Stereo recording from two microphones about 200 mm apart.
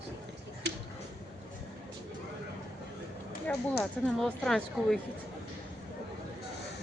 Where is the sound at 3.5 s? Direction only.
5° left (ahead or behind).